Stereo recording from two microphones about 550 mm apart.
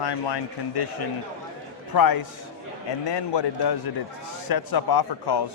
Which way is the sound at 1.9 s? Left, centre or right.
Left.